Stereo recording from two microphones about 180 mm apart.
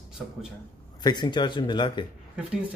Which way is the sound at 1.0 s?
25° left (ahead or behind).